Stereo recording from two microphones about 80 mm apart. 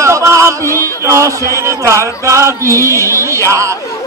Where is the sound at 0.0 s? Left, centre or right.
Right.